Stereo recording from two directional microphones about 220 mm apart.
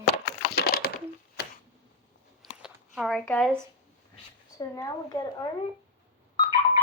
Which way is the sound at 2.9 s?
Centre (ahead or behind).